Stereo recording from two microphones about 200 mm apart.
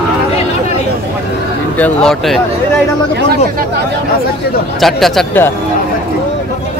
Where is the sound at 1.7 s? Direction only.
5° left (ahead or behind).